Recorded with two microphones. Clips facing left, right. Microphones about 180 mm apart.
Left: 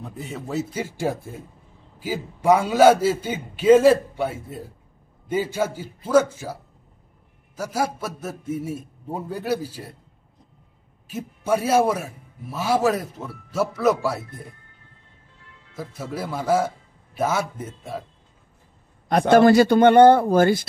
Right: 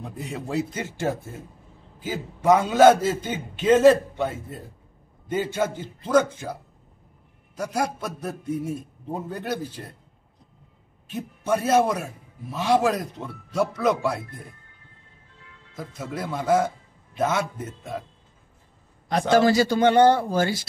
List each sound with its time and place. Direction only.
0.0 s a man's voice: centre (ahead or behind)
11.1 s a man's voice: 5° left (ahead or behind)
15.7 s a man's voice: 10° left (ahead or behind)
19.0 s a man's voice: 55° left (ahead or behind)